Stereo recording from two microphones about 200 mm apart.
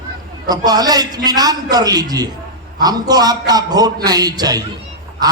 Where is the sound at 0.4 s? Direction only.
20° right (ahead or behind).